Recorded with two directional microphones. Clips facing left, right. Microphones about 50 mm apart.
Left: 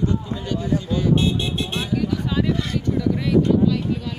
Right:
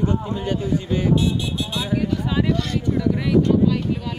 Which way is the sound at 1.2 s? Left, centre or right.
Left.